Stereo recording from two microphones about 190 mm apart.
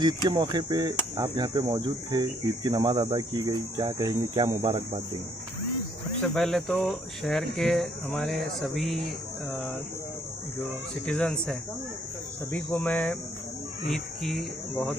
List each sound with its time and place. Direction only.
0.0 s speech: 25° right (ahead or behind)
6.2 s speech: 5° left (ahead or behind)
11.1 s speech: 5° left (ahead or behind)